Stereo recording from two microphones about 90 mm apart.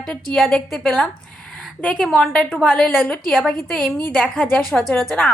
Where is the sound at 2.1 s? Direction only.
10° left (ahead or behind).